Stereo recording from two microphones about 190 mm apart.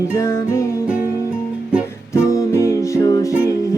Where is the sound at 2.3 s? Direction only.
15° left (ahead or behind).